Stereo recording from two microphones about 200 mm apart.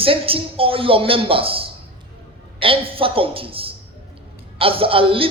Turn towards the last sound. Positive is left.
turn(degrees=-25)  # may be behind; listen again after turning